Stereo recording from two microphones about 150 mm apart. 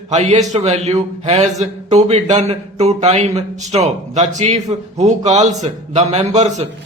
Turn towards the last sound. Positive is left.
turn(degrees=-50)  # may be behind; listen again after turning